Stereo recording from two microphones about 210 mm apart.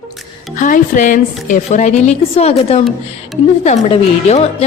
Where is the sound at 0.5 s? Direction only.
40° left (ahead or behind).